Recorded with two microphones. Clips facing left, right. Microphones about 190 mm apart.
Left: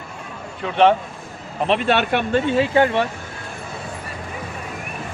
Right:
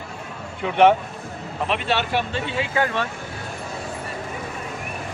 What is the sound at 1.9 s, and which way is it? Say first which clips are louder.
Speech: left 4 dB; 55° left (ahead or behind).